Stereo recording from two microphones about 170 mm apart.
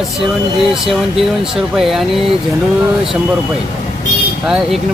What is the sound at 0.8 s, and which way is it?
Speech, centre (ahead or behind).